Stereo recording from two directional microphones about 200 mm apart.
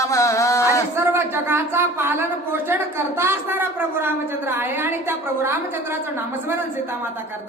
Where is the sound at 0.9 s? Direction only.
10° right (ahead or behind).